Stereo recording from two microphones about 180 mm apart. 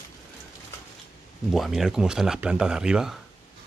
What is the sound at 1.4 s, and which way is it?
Speech, centre (ahead or behind).